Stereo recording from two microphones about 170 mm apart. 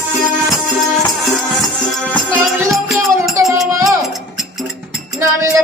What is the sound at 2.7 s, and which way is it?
Music, centre (ahead or behind).